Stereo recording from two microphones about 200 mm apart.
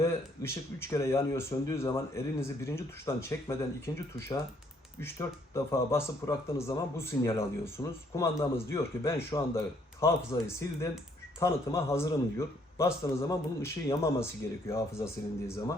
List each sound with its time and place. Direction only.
0.0 s speech: 15° left (ahead or behind)
5.5 s speech: 15° left (ahead or behind)